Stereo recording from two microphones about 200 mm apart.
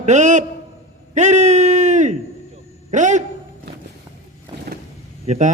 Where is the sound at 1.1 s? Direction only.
35° right (ahead or behind).